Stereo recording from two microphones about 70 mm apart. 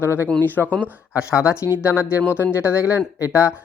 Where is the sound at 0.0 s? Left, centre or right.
Right.